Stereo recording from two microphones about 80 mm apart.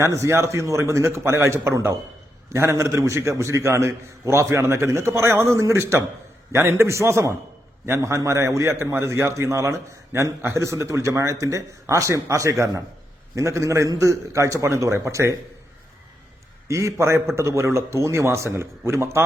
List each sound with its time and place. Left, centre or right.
0.0 s a man's voice: right
16.6 s a man's voice: right